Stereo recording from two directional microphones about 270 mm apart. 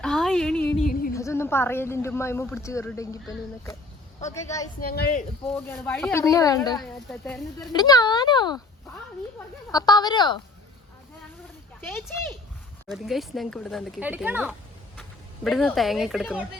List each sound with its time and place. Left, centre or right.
0.0 s a sound: centre
0.8 s music: left
1.1 s a woman's voice: centre
4.8 s speech: left
5.5 s a woman's voice: centre
6.7 s speech: centre
7.7 s speech: centre
9.7 s a woman's voice: centre
12.9 s speech: centre